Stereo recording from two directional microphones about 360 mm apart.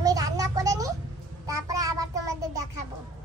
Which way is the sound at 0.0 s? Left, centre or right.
Centre.